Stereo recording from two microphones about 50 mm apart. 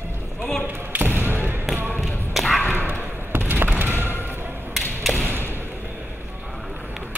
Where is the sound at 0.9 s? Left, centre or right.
Right.